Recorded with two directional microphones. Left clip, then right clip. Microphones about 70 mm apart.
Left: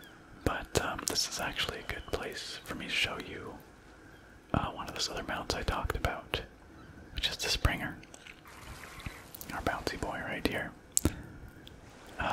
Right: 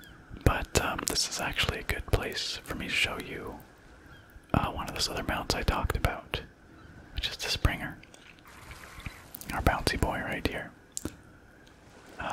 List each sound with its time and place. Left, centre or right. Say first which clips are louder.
0.5 s whispering: right 4 dB; right
1.2 s speech: right 3 dB; centre
1.6 s speech: right 5 dB; right
4.5 s speech: right 4 dB; right
7.2 s speech: even; centre
8.6 s a sound: right 1 dB; centre
9.6 s speech: right 6 dB; right
10.2 s speech: right 2 dB; centre
11.0 s squish: left 7 dB; left
12.2 s a sound: left 2 dB; centre